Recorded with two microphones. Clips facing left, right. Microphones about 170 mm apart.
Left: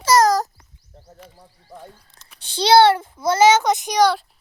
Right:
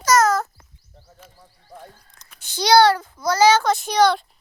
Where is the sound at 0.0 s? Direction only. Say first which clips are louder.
Left 2 dB; 30° left (ahead or behind).